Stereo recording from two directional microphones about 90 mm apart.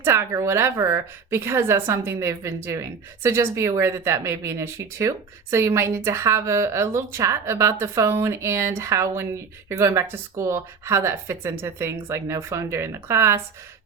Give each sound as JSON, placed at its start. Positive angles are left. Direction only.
{"t": 0.0, "sound": "speech", "side_deg": -30}